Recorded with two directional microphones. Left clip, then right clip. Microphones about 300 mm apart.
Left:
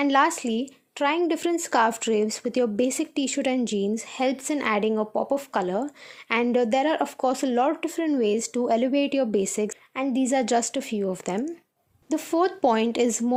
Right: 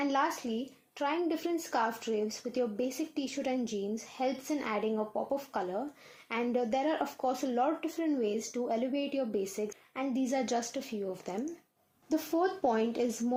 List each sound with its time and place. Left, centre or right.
0.0 s speech: left